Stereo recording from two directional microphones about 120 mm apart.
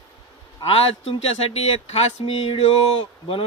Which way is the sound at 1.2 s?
60° left (ahead or behind).